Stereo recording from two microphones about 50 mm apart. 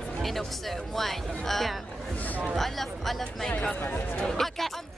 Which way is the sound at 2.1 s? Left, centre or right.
Left.